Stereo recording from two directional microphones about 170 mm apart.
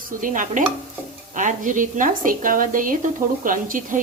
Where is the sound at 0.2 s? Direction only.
50° right (ahead or behind).